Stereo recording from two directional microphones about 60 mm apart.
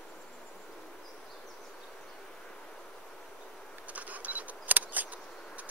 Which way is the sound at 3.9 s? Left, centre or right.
Right.